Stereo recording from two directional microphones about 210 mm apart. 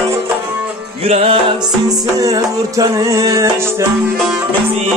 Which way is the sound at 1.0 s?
30° right (ahead or behind).